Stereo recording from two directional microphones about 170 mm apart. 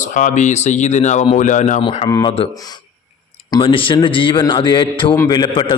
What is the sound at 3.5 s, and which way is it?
A man's voice, 30° left (ahead or behind).